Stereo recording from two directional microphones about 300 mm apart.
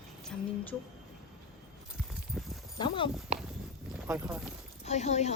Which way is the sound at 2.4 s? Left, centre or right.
Centre.